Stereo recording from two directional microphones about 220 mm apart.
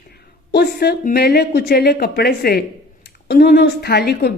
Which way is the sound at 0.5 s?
45° left (ahead or behind).